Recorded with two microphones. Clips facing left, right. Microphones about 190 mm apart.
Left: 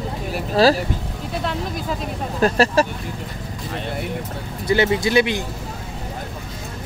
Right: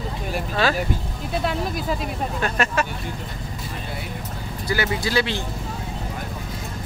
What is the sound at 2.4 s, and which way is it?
Speech, 35° left (ahead or behind).